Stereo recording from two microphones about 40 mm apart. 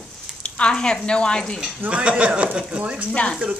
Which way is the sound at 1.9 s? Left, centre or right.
Right.